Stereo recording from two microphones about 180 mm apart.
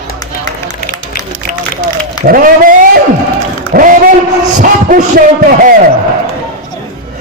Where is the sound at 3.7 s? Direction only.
45° right (ahead or behind).